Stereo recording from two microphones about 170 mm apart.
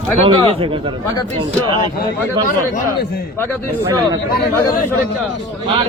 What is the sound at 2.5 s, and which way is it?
Speech, 55° left (ahead or behind).